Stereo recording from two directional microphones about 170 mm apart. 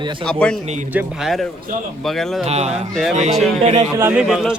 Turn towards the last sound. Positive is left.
turn(degrees=0)  # may be behind; listen again after turning